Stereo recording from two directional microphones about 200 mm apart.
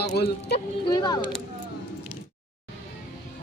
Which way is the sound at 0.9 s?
20° left (ahead or behind).